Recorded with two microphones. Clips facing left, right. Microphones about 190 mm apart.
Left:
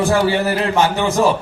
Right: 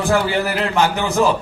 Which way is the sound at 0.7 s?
20° left (ahead or behind).